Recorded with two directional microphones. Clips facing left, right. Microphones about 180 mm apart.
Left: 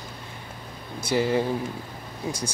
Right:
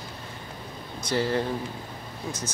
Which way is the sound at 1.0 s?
10° left (ahead or behind).